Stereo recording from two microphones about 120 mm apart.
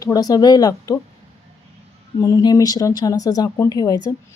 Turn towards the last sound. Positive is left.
turn(degrees=30)  # may be behind; listen again after turning